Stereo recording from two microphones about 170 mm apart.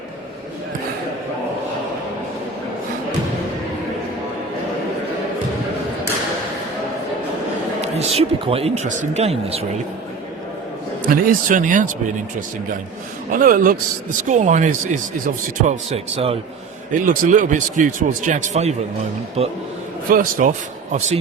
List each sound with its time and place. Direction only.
7.8 s speech: 40° right (ahead or behind)
11.0 s speech: 55° right (ahead or behind)
13.3 s speech: 55° right (ahead or behind); by 16.4 s 35° right (ahead or behind)
17.0 s speech: 50° right (ahead or behind)
20.1 s speech: 55° right (ahead or behind)